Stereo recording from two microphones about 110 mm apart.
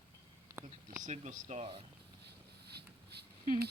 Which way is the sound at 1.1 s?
90° right.